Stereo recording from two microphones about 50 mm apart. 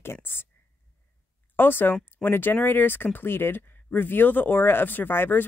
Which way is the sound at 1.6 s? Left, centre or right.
Left.